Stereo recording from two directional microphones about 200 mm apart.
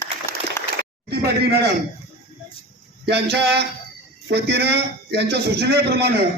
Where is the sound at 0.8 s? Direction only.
50° right (ahead or behind).